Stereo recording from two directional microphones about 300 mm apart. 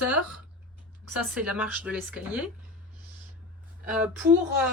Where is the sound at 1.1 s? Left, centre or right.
Centre.